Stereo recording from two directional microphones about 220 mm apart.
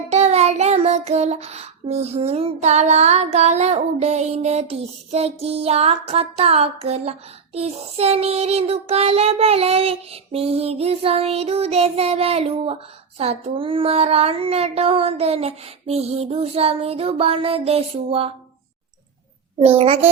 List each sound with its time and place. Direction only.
0.1 s child singing: 30° right (ahead or behind)
19.5 s child singing: 25° right (ahead or behind)